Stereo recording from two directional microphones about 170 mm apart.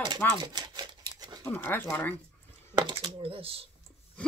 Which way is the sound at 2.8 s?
30° right (ahead or behind).